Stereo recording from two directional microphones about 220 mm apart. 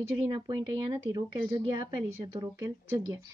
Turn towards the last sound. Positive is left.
turn(degrees=-15)  # may be behind; listen again after turning